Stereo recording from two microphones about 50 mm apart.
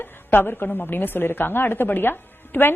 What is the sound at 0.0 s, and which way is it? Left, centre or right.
A woman's voice, left.